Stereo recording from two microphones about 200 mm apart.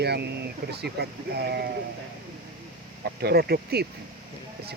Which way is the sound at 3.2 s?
50° right (ahead or behind).